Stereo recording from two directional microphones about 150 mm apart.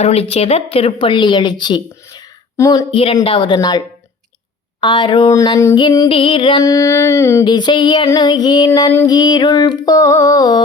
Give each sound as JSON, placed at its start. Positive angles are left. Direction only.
{"t": 0.0, "sound": "a woman's voice", "side_deg": 45}
{"t": 2.9, "sound": "a woman's voice", "side_deg": 40}
{"t": 3.2, "sound": "music", "side_deg": 35}
{"t": 6.1, "sound": "a woman's voice", "side_deg": 35}
{"t": 6.6, "sound": "music", "side_deg": 25}
{"t": 7.4, "sound": "music", "side_deg": 30}